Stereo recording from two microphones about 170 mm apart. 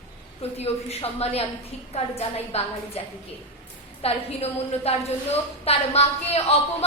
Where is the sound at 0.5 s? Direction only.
35° left (ahead or behind).